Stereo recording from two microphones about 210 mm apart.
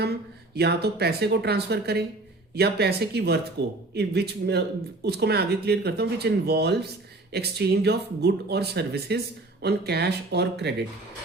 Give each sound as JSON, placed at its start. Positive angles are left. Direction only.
{"t": 0.5, "sound": "speech", "side_deg": -50}